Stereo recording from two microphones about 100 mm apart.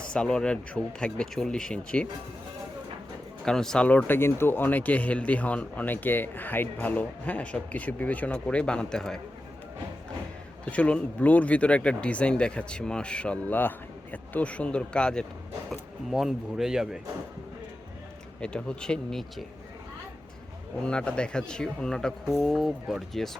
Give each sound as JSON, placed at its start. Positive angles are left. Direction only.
{"t": 0.0, "sound": "speech", "side_deg": 10}
{"t": 3.4, "sound": "speech", "side_deg": 5}
{"t": 3.8, "sound": "speech", "side_deg": 15}
{"t": 10.7, "sound": "speech", "side_deg": 10}
{"t": 15.7, "sound": "speech", "side_deg": 0}
{"t": 18.3, "sound": "speech", "side_deg": 10}
{"t": 20.8, "sound": "speech", "side_deg": 10}